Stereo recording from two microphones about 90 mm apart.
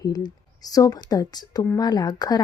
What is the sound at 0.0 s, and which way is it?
Speech, 45° left (ahead or behind).